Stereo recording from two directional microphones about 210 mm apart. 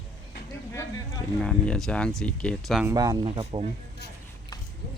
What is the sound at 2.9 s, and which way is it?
Speech, 15° right (ahead or behind).